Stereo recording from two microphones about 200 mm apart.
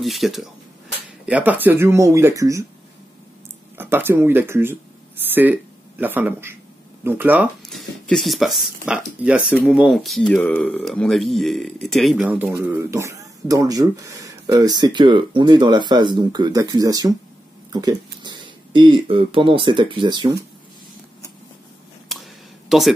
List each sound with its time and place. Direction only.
0.0 s speech: centre (ahead or behind); by 2.6 s 15° right (ahead or behind)
3.7 s speech: 10° right (ahead or behind)
22.1 s a sound: centre (ahead or behind)